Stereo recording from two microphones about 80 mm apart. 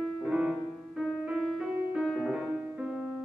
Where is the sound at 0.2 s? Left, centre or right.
Centre.